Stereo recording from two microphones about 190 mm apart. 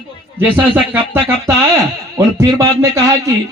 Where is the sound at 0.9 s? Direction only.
10° right (ahead or behind).